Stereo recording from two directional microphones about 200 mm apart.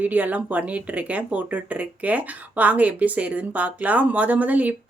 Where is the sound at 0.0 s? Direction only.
10° right (ahead or behind).